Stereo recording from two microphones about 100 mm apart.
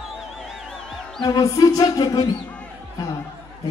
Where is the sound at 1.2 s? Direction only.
35° left (ahead or behind).